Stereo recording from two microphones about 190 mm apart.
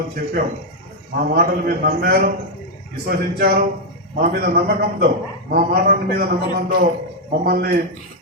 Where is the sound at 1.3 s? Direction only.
50° right (ahead or behind).